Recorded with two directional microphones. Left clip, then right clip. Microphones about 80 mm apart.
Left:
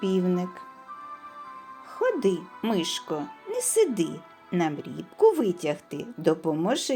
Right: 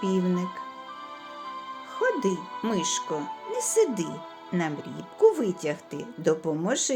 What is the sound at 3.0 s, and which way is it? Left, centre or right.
Speech, right.